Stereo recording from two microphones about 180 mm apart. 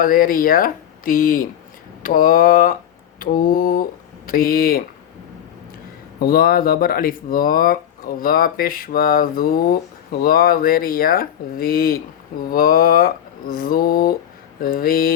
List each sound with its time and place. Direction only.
0.0 s speech: 50° left (ahead or behind)
6.1 s speech: 55° left (ahead or behind)